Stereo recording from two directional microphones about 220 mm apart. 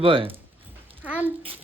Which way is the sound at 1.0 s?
5° right (ahead or behind).